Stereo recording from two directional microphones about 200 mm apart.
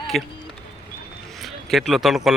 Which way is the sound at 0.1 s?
Centre (ahead or behind).